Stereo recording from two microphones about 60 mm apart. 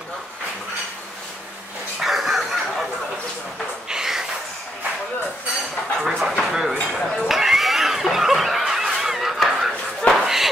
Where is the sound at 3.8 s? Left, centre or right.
Centre.